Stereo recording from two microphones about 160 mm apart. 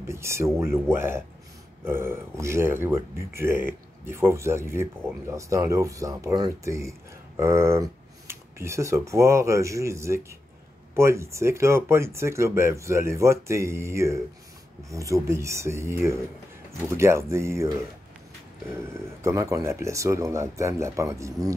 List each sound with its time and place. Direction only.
0.1 s speech: 15° right (ahead or behind)
18.8 s speech: 20° right (ahead or behind)